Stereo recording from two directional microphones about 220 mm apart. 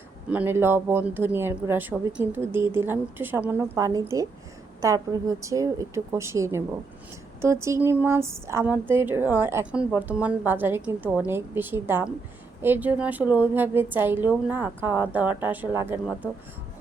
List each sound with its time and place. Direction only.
0.3 s speech: 10° right (ahead or behind)